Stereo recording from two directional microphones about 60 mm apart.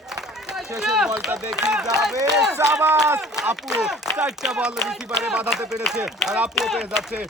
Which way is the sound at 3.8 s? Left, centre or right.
Centre.